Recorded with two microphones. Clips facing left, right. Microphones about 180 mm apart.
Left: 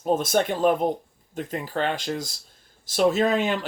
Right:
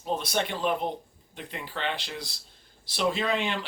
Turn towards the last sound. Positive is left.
turn(degrees=45)  # may be behind; listen again after turning